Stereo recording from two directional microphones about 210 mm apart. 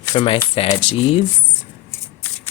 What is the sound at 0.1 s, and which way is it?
Speech, 25° left (ahead or behind).